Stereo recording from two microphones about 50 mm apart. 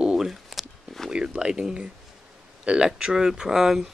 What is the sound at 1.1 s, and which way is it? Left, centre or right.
Speech, centre.